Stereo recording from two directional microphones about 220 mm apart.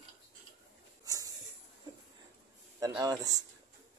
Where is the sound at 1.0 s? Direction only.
15° right (ahead or behind).